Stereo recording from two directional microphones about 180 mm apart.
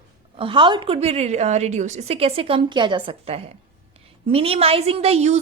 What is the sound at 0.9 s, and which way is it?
A woman's voice, 35° right (ahead or behind).